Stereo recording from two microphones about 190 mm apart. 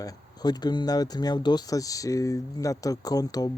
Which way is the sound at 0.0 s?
20° left (ahead or behind).